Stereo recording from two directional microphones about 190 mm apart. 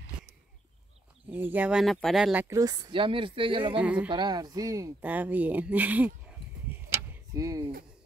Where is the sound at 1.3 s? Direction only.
10° right (ahead or behind).